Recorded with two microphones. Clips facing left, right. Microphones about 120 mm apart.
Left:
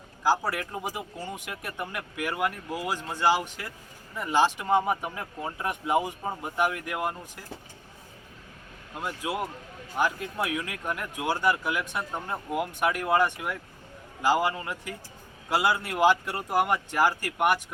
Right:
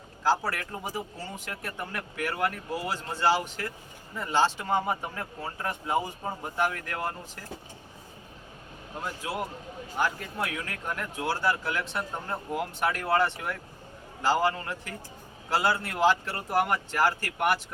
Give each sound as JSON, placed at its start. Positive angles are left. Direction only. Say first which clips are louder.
{"t": 0.2, "sound": "speech", "louder": "left 1 dB", "side_deg": 15}
{"t": 9.0, "sound": "speech", "louder": "left 2 dB", "side_deg": 15}